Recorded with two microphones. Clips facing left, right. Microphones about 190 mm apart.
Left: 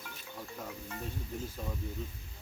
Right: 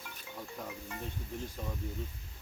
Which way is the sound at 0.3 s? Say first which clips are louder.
Even; centre (ahead or behind).